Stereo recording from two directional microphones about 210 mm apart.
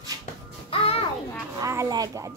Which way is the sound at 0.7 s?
25° left (ahead or behind).